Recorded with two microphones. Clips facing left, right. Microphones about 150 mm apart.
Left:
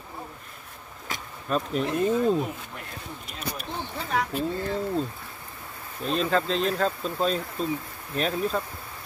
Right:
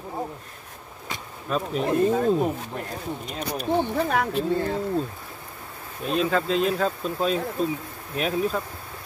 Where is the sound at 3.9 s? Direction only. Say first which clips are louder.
Right 5 dB; 55° right (ahead or behind).